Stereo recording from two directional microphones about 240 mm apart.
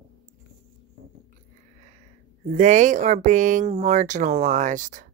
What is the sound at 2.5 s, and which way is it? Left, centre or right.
Speech, right.